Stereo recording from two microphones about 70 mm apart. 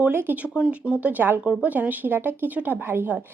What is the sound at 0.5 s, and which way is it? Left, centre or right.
Speech, centre.